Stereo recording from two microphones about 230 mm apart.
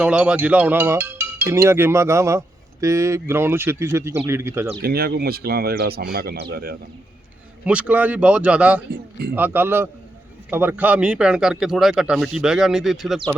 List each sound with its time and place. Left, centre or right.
0.0 s speech: centre
4.8 s speech: right
7.6 s a man's voice: centre